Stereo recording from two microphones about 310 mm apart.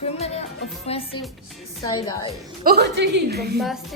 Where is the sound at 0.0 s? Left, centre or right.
Centre.